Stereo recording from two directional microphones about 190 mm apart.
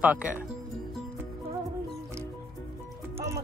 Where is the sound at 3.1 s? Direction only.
15° right (ahead or behind).